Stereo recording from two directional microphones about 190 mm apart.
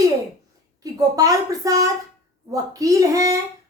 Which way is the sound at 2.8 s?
20° right (ahead or behind).